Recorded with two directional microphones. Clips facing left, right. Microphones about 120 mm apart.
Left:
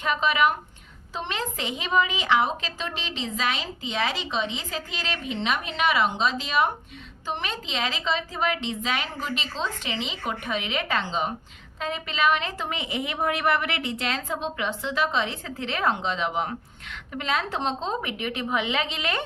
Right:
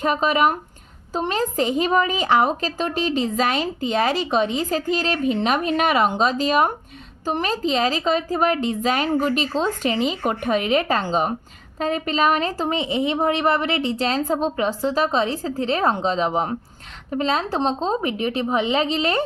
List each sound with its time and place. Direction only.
0.0 s a woman's voice: 40° right (ahead or behind)